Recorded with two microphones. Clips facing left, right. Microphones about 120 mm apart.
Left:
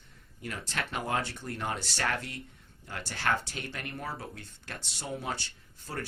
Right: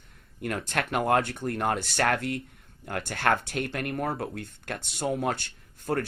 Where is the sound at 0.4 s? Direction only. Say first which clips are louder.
Right 7 dB; 55° right (ahead or behind).